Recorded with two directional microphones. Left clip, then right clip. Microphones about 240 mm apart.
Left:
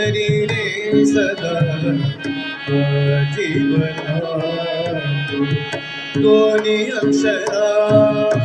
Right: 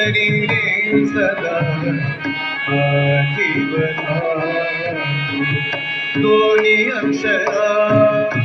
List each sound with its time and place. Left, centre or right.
0.0 s music: left
2.7 s music: left
6.1 s music: left